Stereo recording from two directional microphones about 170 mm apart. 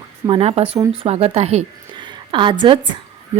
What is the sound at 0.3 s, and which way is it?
A woman's voice, 35° right (ahead or behind).